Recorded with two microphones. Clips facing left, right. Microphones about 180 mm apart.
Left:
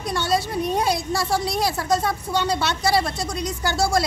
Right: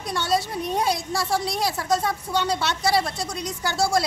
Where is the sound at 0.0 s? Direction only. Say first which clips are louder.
Left 1 dB; centre (ahead or behind).